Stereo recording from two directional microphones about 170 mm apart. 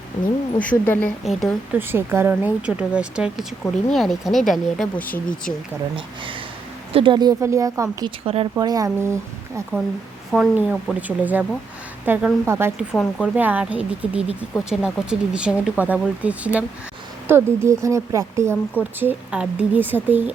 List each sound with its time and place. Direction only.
0.6 s a woman's voice: 10° left (ahead or behind)
1.7 s speech: 10° right (ahead or behind); by 5.5 s 10° left (ahead or behind)
6.9 s speech: 30° right (ahead or behind)
10.3 s speech: 5° right (ahead or behind)
12.9 s speech: centre (ahead or behind)